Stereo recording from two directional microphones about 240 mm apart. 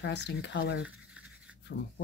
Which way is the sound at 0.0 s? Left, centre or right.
Left.